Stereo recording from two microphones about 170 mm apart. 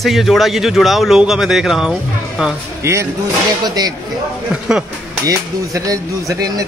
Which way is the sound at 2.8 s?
15° right (ahead or behind).